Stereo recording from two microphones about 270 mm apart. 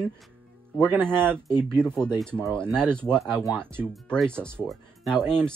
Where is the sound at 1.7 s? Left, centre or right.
Centre.